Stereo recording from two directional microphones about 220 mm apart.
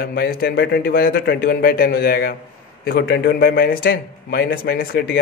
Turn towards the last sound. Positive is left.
turn(degrees=45)  # may be behind; listen again after turning